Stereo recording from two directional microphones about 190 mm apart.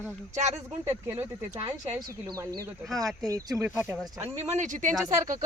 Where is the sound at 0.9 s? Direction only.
10° right (ahead or behind).